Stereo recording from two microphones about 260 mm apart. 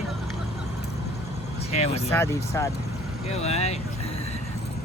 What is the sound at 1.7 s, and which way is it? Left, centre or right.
Speech, left.